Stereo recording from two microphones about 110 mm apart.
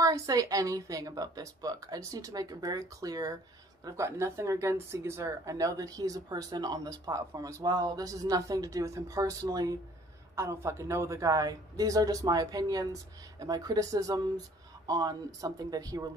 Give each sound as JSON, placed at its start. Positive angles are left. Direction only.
{"t": 0.0, "sound": "speech", "side_deg": -30}